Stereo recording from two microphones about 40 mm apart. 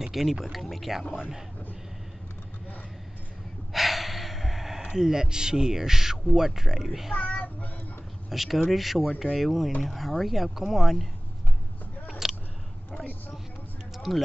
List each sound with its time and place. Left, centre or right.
0.1 s speech: centre
1.1 s speech: centre
3.7 s speech: centre
7.2 s child singing: left
8.3 s speech: centre
12.2 s a sound: centre
13.9 s a sound: centre